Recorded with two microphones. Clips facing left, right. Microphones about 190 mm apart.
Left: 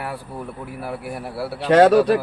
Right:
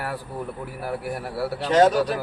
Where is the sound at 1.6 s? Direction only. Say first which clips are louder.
Left 5 dB; 60° left (ahead or behind).